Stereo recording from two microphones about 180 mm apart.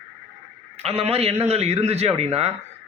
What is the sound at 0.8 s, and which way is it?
A man's voice, 35° right (ahead or behind).